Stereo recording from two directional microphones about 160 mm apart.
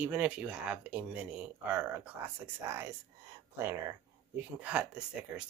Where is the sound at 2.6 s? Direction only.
20° right (ahead or behind).